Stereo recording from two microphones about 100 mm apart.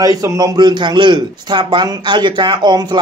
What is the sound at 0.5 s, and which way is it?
A man's voice, 50° right (ahead or behind).